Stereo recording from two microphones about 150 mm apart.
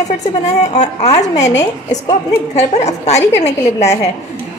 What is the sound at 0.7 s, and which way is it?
A woman's voice, 45° left (ahead or behind).